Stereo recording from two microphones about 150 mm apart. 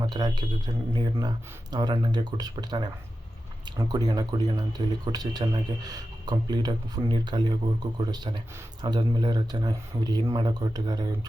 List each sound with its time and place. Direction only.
0.0 s speech: 30° right (ahead or behind)